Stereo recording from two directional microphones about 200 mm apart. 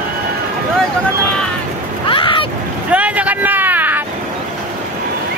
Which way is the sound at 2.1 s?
25° left (ahead or behind).